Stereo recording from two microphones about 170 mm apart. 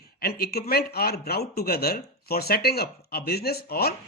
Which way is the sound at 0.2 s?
65° left (ahead or behind).